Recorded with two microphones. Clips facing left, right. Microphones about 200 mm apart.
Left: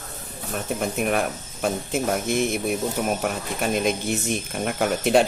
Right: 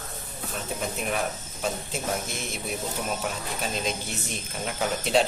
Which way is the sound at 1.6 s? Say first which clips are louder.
Left 6 dB; 55° left (ahead or behind).